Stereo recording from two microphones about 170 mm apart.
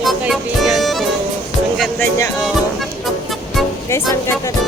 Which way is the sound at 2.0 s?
15° left (ahead or behind).